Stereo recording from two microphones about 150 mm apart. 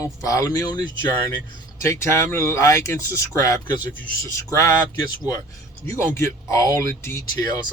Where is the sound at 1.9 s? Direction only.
20° left (ahead or behind).